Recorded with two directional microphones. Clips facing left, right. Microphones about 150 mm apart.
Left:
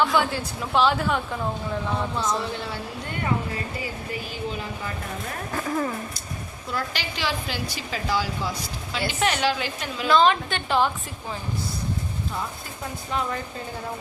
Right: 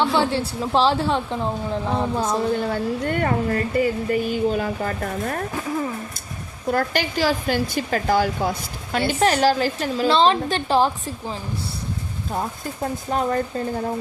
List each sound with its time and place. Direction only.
0.0 s a woman's voice: 30° right (ahead or behind)
2.4 s speech: 45° right (ahead or behind)
5.5 s speech: 5° right (ahead or behind)
6.7 s speech: 50° right (ahead or behind)
9.1 s a woman's voice: 35° right (ahead or behind)